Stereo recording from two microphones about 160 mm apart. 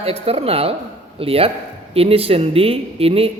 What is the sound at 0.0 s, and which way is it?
A man's voice, 40° right (ahead or behind).